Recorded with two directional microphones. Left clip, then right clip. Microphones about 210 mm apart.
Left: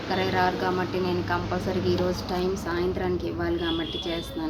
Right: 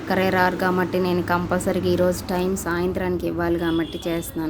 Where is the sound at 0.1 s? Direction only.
50° right (ahead or behind).